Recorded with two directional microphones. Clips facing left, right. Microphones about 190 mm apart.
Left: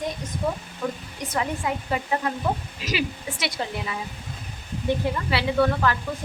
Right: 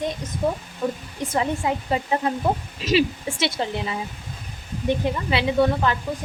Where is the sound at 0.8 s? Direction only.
30° right (ahead or behind).